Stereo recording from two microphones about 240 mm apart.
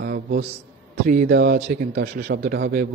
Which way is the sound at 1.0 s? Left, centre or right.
Right.